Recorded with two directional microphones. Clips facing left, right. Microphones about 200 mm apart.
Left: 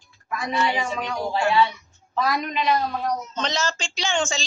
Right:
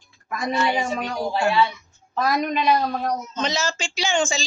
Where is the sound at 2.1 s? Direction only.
45° right (ahead or behind).